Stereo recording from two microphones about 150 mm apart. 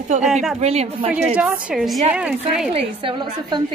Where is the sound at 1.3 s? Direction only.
5° right (ahead or behind).